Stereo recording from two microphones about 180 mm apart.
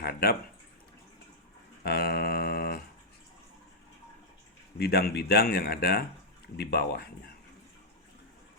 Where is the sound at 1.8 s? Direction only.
60° left (ahead or behind).